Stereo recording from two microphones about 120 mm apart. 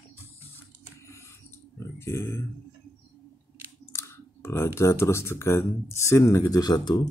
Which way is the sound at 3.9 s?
25° left (ahead or behind).